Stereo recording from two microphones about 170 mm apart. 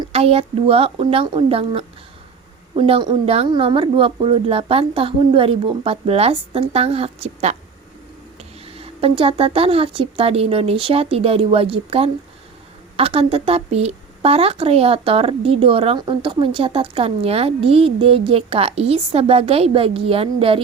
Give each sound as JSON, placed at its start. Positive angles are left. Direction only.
{"t": 0.1, "sound": "a woman's voice", "side_deg": -35}
{"t": 8.6, "sound": "a woman's voice", "side_deg": -35}